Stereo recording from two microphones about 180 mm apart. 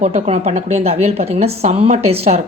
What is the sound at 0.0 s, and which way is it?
A woman's voice, 40° right (ahead or behind).